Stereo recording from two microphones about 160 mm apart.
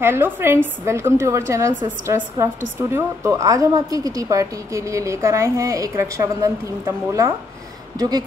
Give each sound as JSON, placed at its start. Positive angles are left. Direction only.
{"t": 0.0, "sound": "a woman's voice", "side_deg": -15}